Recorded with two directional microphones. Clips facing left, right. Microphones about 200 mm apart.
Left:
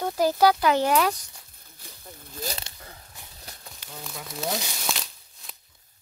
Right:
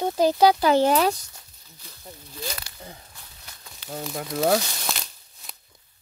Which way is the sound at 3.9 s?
60° right (ahead or behind).